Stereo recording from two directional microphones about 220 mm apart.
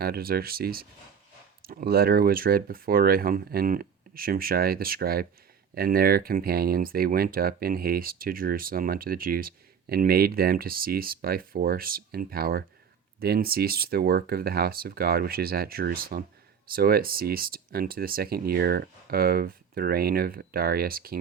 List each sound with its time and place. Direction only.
0.0 s speech: 45° right (ahead or behind)